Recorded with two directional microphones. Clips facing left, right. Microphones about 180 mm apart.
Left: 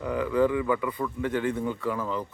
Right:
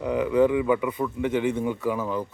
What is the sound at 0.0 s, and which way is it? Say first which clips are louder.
A man's voice: right 3 dB; 20° right (ahead or behind).